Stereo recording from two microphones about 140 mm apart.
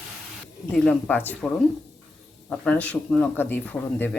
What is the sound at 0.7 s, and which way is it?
Speech, 5° left (ahead or behind).